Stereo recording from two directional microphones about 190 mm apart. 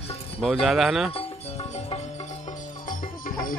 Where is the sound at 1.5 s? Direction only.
30° left (ahead or behind).